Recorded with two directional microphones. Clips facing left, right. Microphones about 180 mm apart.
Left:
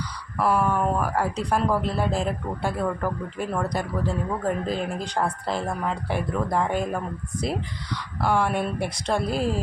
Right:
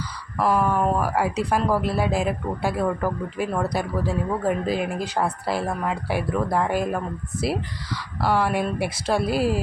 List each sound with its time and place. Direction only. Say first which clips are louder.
0.3 s speech: right 1 dB; 10° right (ahead or behind)
8.2 s speech: right 1 dB; 5° right (ahead or behind)